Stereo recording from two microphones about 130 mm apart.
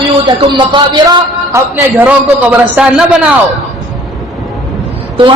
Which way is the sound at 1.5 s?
15° right (ahead or behind).